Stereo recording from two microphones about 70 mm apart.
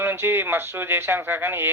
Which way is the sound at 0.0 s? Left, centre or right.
Right.